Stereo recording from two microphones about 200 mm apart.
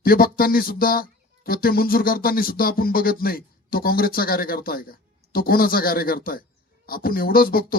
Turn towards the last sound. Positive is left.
turn(degrees=45)  # may be behind; listen again after turning